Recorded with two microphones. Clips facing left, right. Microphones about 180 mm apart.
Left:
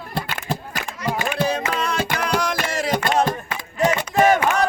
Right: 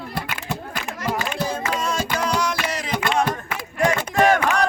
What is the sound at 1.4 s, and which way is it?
Music, 65° left (ahead or behind).